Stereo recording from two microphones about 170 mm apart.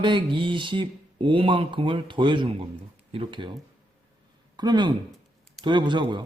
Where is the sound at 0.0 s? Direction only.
30° right (ahead or behind).